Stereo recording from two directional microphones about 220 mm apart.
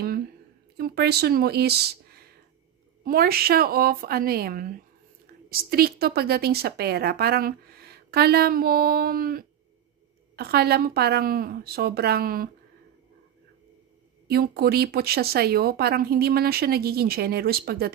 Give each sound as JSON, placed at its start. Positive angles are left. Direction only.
{"t": 0.7, "sound": "a woman's voice", "side_deg": -45}
{"t": 14.2, "sound": "a woman's voice", "side_deg": -45}